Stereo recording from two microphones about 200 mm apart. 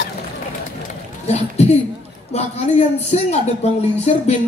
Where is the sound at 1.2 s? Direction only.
35° left (ahead or behind).